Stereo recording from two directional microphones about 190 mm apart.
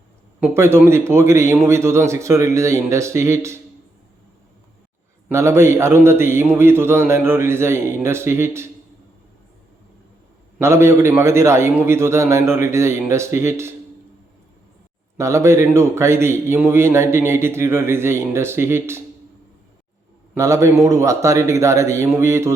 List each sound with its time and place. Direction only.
0.3 s a man's voice: 10° right (ahead or behind)
5.3 s a man's voice: 15° right (ahead or behind)
10.6 s a man's voice: 15° right (ahead or behind)
15.2 s a man's voice: 15° right (ahead or behind)
20.3 s a man's voice: 15° right (ahead or behind)